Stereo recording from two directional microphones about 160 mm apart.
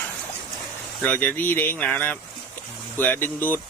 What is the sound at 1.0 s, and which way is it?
Speech, 10° left (ahead or behind).